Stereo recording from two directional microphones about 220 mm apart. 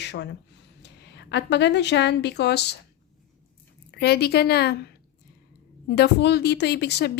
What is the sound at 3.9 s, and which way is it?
Speech, 50° left (ahead or behind).